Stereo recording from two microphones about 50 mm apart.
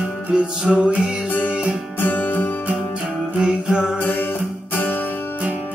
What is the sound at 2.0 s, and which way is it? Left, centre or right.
Music, left.